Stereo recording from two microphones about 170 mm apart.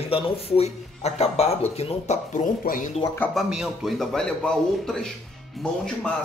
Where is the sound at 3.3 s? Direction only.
Centre (ahead or behind).